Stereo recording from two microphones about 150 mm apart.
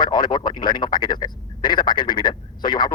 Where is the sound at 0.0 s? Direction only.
30° left (ahead or behind).